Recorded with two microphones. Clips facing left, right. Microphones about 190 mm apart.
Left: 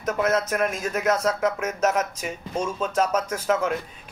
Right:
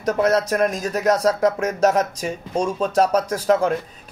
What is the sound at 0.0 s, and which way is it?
Speech, 35° right (ahead or behind).